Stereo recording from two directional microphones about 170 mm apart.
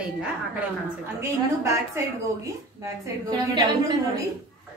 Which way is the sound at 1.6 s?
15° right (ahead or behind).